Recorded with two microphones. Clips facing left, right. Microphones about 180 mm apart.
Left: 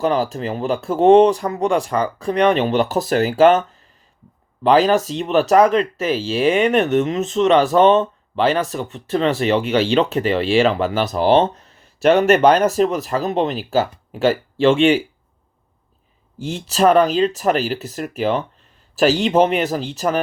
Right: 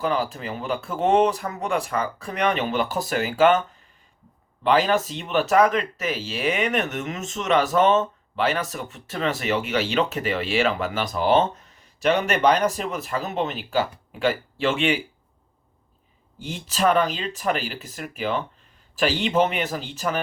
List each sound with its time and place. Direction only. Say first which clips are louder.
0.0 s speech: left 6 dB; 40° left (ahead or behind)
4.6 s speech: left 6 dB; 35° left (ahead or behind)
12.0 s speech: left 7 dB; 55° left (ahead or behind)
12.7 s speech: left 10 dB; 40° left (ahead or behind)
16.6 s speech: left 7 dB; 40° left (ahead or behind)